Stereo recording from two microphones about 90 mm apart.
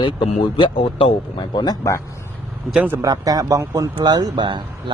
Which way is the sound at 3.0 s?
45° right (ahead or behind).